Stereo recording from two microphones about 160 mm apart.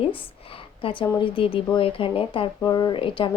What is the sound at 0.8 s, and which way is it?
A woman's voice, 35° left (ahead or behind).